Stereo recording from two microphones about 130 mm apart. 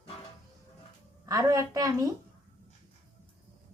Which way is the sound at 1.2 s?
25° right (ahead or behind).